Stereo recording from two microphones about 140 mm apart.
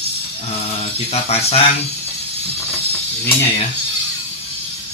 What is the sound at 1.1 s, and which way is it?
Speech, 45° left (ahead or behind).